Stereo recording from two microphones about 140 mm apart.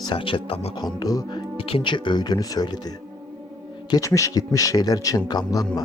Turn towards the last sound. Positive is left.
turn(degrees=30)  # may be behind; listen again after turning